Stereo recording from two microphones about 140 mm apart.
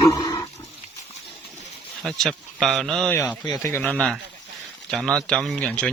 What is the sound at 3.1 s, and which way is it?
Speech, 15° left (ahead or behind).